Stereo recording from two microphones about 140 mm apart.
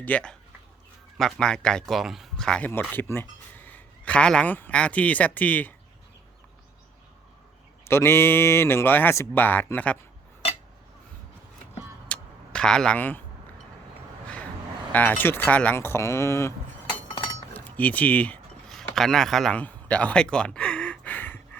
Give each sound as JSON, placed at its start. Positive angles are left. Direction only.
{"t": 0.0, "sound": "speech", "side_deg": 10}
{"t": 7.9, "sound": "speech", "side_deg": 15}
{"t": 12.0, "sound": "vehicle", "side_deg": 10}
{"t": 15.2, "sound": "speech", "side_deg": 15}
{"t": 17.5, "sound": "a sound", "side_deg": 10}